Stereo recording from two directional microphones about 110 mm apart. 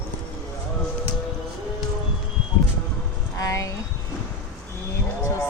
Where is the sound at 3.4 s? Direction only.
30° left (ahead or behind).